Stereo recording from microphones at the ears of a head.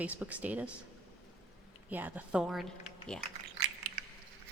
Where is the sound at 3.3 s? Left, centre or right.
Right.